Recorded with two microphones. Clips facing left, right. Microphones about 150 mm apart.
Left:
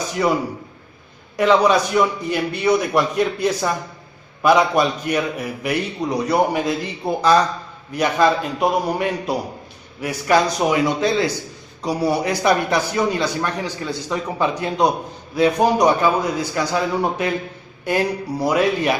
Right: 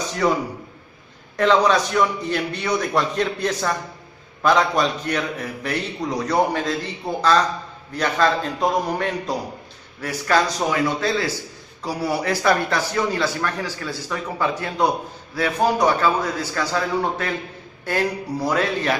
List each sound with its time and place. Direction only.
1.3 s a man's voice: 10° left (ahead or behind)